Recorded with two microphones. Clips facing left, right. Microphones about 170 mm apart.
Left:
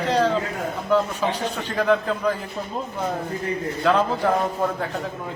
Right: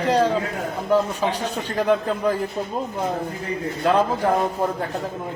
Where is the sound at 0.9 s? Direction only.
40° right (ahead or behind).